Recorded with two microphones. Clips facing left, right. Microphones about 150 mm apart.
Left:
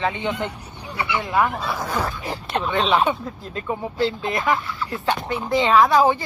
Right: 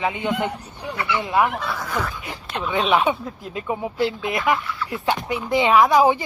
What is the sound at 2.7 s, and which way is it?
Speech, 10° right (ahead or behind).